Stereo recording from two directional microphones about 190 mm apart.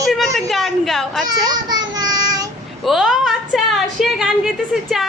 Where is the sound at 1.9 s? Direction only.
20° right (ahead or behind).